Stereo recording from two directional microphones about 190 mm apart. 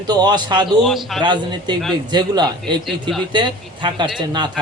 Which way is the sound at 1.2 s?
25° right (ahead or behind).